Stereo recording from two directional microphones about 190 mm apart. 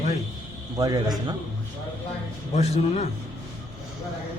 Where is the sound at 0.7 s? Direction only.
20° right (ahead or behind).